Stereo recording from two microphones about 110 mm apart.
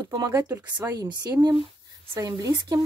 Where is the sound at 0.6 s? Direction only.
35° right (ahead or behind).